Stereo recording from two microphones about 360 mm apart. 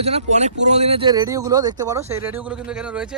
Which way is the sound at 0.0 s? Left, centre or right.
Centre.